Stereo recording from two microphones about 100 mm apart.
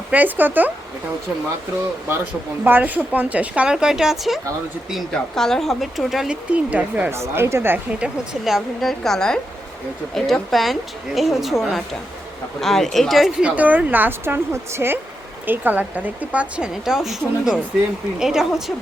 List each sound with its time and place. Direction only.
0.1 s a woman's voice: 15° right (ahead or behind)
2.6 s a woman's voice: 20° right (ahead or behind)
7.1 s speech: 25° right (ahead or behind)
7.9 s speech: 10° right (ahead or behind)
13.6 s a woman's voice: 15° right (ahead or behind)